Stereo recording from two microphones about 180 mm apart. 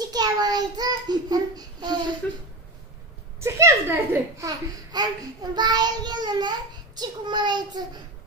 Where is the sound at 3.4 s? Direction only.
15° right (ahead or behind).